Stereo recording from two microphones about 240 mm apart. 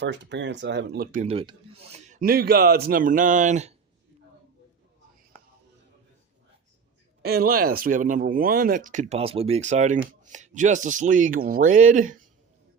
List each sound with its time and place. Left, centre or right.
0.0 s speech: right
7.2 s speech: right